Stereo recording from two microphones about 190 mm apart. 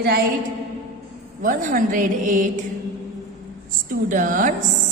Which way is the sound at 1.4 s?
45° right (ahead or behind).